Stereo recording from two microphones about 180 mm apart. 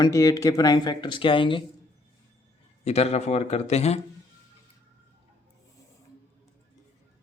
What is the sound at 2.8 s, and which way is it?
A man's voice, 35° left (ahead or behind).